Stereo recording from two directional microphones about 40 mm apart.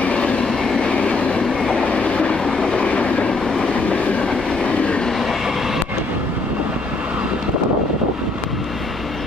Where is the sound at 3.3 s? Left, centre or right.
Centre.